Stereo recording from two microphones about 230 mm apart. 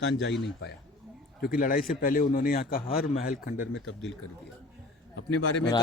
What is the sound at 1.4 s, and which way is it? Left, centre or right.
Speech, left.